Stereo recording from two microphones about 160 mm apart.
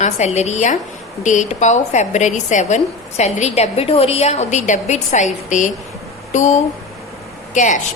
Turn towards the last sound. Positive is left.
turn(degrees=50)  # may be behind; listen again after turning